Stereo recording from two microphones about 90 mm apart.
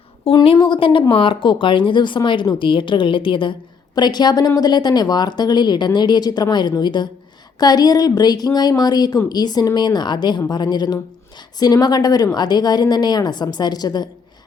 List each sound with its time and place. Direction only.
0.8 s a woman's voice: 85° left
1.1 s a woman's voice: 70° left (ahead or behind)
3.9 s a woman's voice: 50° left (ahead or behind)